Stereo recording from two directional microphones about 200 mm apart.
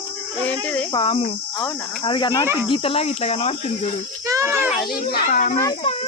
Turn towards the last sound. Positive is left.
turn(degrees=25)  # may be behind; listen again after turning